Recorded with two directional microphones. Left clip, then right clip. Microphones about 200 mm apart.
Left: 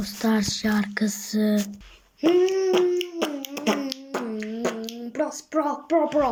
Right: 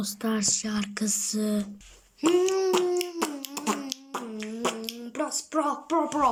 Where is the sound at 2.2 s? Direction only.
20° right (ahead or behind).